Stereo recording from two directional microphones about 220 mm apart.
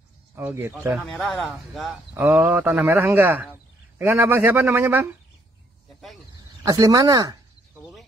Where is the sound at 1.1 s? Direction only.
Centre (ahead or behind).